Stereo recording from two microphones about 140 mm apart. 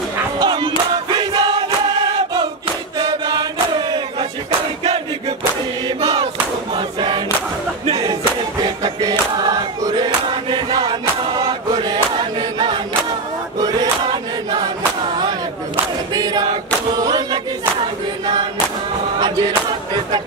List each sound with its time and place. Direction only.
0.4 s music: 35° right (ahead or behind)
3.0 s chant: 30° right (ahead or behind)
5.9 s a sound: 40° right (ahead or behind)
6.7 s choir: 35° right (ahead or behind)
7.8 s a sound: 45° right (ahead or behind)
8.6 s music: 25° right (ahead or behind)
9.4 s crowd: 30° right (ahead or behind)
11.8 s choir: 30° right (ahead or behind)
13.6 s a sound: 30° right (ahead or behind)
15.0 s choir: 35° right (ahead or behind)
19.1 s music: 30° right (ahead or behind)